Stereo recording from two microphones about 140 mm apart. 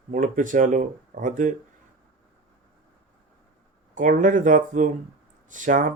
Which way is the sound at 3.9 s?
70° right (ahead or behind).